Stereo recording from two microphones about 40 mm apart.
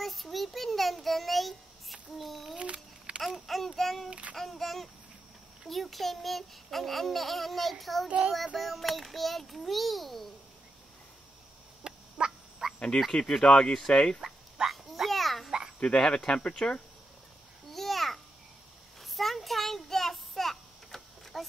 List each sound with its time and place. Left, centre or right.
0.0 s child singing: centre
2.5 s a sound: right
3.3 s a sound: centre
4.1 s child singing: right
4.4 s a sound: centre
5.7 s a child's voice: centre
11.8 s dog: right
12.6 s cricket: centre
13.1 s speech: centre
14.7 s a sound: centre
15.8 s speech: left
17.6 s babbling: centre
18.9 s child singing: centre